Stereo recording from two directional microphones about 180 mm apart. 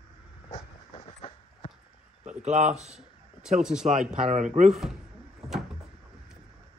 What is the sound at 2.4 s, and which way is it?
Speech, 40° right (ahead or behind).